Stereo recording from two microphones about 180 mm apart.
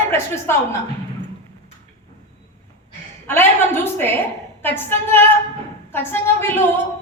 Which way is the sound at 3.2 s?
10° left (ahead or behind).